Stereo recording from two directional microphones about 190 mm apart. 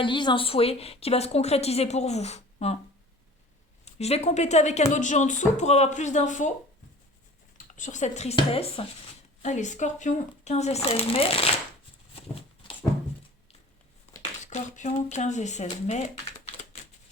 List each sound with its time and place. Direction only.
0.0 s a woman's voice: 25° left (ahead or behind)
3.8 s a woman's voice: 35° left (ahead or behind)
7.8 s a woman's voice: 40° left (ahead or behind)
12.1 s a sound: 30° left (ahead or behind)
14.4 s a woman's voice: 40° left (ahead or behind)